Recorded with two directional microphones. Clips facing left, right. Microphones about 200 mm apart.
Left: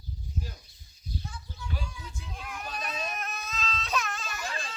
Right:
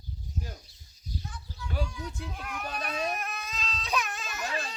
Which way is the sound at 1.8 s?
Centre (ahead or behind).